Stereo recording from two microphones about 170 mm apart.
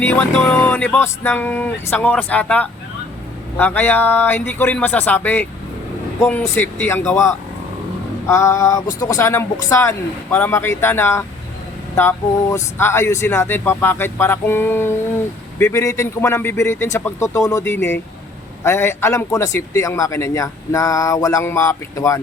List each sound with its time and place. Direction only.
0.0 s a man's voice: 10° left (ahead or behind)